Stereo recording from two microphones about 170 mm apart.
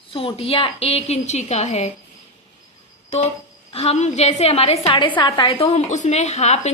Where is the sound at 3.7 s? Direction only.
35° left (ahead or behind).